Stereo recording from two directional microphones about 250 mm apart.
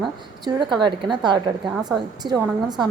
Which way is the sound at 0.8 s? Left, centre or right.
Centre.